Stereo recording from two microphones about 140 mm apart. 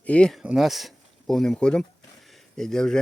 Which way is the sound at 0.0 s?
10° left (ahead or behind).